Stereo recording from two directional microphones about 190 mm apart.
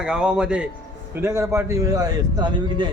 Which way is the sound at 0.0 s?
5° right (ahead or behind).